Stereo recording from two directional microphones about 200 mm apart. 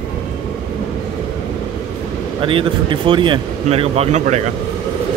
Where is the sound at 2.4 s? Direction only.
25° right (ahead or behind).